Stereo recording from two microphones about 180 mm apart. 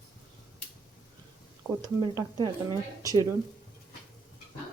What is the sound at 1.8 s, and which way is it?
Speech, 20° right (ahead or behind).